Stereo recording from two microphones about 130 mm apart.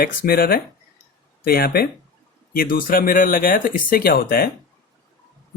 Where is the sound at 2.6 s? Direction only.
90° left.